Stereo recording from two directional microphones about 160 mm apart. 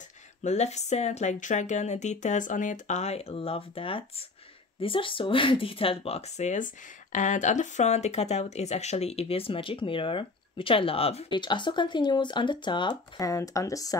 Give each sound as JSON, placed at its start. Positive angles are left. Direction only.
{"t": 0.4, "sound": "speech", "side_deg": 45}